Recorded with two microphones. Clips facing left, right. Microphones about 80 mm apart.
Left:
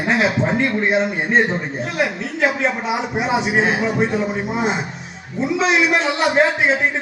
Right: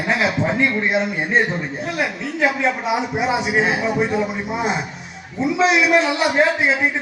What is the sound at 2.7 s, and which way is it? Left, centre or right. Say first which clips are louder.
A man's voice: right 1 dB; left.